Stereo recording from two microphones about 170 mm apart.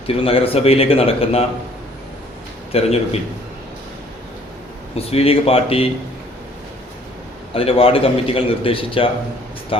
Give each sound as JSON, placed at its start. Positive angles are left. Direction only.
{"t": 0.1, "sound": "a man's voice", "side_deg": 35}
{"t": 2.7, "sound": "a man's voice", "side_deg": 35}
{"t": 4.9, "sound": "a man's voice", "side_deg": 35}
{"t": 7.5, "sound": "a man's voice", "side_deg": 35}